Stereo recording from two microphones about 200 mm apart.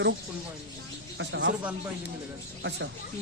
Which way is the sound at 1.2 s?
60° right (ahead or behind).